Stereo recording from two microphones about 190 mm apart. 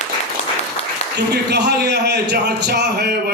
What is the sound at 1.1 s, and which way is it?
A man's voice, 65° right (ahead or behind).